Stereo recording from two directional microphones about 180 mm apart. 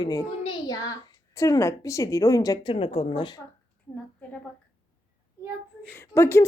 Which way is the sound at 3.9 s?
10° left (ahead or behind).